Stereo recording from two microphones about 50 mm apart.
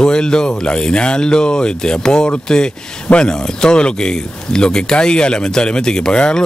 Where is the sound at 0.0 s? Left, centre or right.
Centre.